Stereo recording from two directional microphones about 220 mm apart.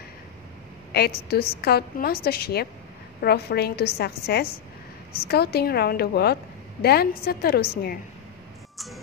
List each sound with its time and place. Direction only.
0.9 s a woman's voice: 45° left (ahead or behind)
8.7 s music: centre (ahead or behind)